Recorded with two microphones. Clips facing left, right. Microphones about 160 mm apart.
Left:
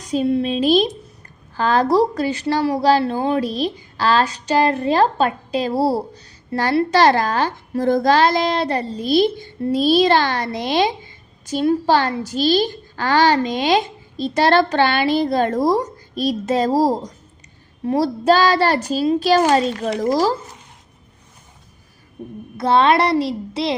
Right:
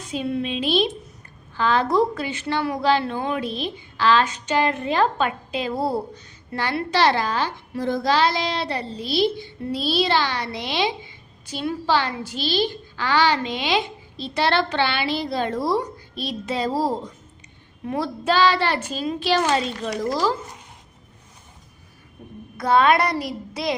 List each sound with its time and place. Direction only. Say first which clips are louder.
0.1 s a child's voice: left 7 dB; 35° left (ahead or behind)
22.5 s speech: left 3 dB; 25° left (ahead or behind)